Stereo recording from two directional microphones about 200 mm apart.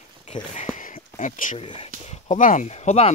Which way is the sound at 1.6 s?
25° left (ahead or behind).